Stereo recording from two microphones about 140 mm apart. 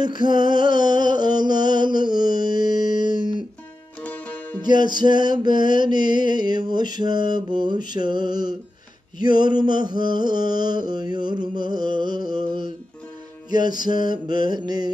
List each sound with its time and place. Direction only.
0.0 s music: 30° right (ahead or behind)
4.0 s music: 10° left (ahead or behind)
4.6 s music: 30° right (ahead or behind)